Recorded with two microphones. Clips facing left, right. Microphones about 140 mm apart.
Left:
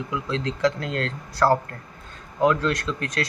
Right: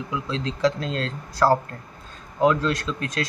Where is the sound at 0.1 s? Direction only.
20° right (ahead or behind).